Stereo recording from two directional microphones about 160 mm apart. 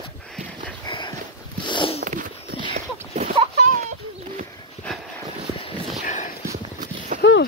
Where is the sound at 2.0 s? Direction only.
60° right (ahead or behind).